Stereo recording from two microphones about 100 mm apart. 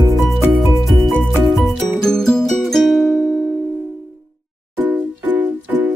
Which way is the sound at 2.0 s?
5° left (ahead or behind).